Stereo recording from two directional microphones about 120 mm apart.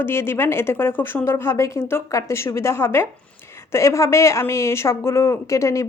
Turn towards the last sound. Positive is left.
turn(degrees=25)  # may be behind; listen again after turning